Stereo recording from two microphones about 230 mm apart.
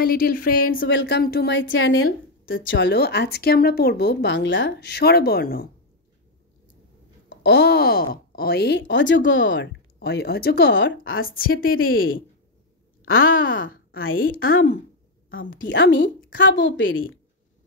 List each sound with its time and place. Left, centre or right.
0.0 s speech: left
0.7 s speech: left
7.2 s speech: left
11.2 s speech: left
13.1 s speech: left